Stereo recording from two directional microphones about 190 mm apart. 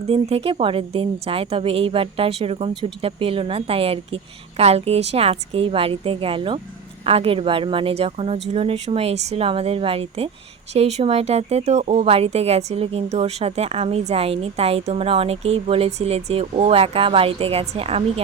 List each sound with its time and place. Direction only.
0.1 s a woman's voice: 30° right (ahead or behind)